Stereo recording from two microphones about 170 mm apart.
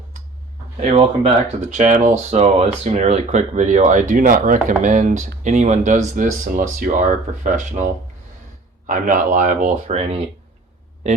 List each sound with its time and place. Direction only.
0.8 s speech: 40° right (ahead or behind)
8.9 s speech: 50° right (ahead or behind)